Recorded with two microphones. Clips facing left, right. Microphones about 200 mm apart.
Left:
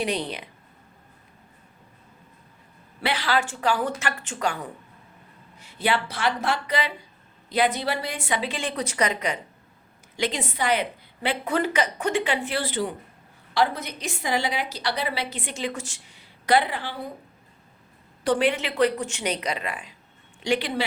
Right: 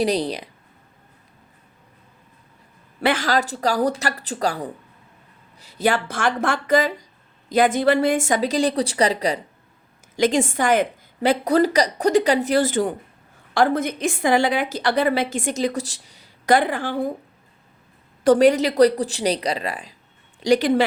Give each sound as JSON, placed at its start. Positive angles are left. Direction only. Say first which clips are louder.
{"t": 0.0, "sound": "a woman's voice", "louder": "right 6 dB", "side_deg": -35}
{"t": 3.0, "sound": "a woman's voice", "louder": "right 5 dB", "side_deg": -45}
{"t": 10.2, "sound": "a woman's voice", "louder": "right 8 dB", "side_deg": -45}
{"t": 18.2, "sound": "a woman's voice", "louder": "right 8 dB", "side_deg": -45}